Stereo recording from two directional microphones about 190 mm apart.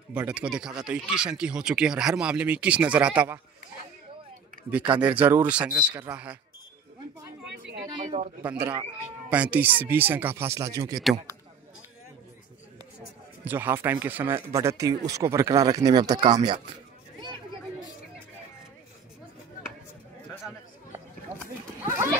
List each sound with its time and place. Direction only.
0.1 s speech: 5° right (ahead or behind)
4.6 s speech: 10° right (ahead or behind)
8.0 s speech: 35° right (ahead or behind)
8.5 s speech: 5° right (ahead or behind)
13.4 s speech: 10° right (ahead or behind)